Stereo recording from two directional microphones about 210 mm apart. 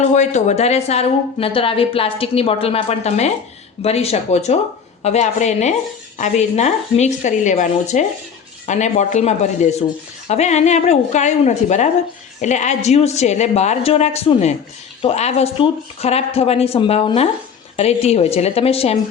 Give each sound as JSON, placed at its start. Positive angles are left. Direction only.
{"t": 0.0, "sound": "a woman's voice", "side_deg": 35}